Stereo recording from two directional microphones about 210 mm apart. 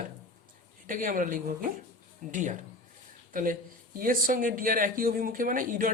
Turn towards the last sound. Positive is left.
turn(degrees=-40)  # may be behind; listen again after turning